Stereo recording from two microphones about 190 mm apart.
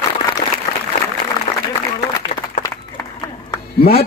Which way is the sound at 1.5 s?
40° left (ahead or behind).